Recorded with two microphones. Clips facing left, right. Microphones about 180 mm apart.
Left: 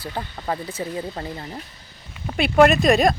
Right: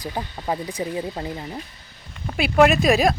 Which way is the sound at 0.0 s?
10° right (ahead or behind).